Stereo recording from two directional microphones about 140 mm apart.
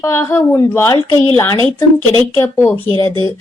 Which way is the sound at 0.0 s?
20° left (ahead or behind).